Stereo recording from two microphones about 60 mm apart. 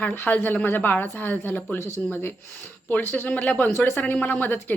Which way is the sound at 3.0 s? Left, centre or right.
Left.